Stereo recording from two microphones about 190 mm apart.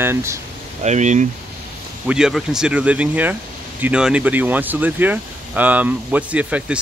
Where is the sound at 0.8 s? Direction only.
40° right (ahead or behind).